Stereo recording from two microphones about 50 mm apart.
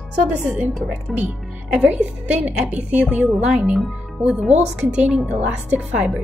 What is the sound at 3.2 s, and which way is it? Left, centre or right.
A woman's voice, centre.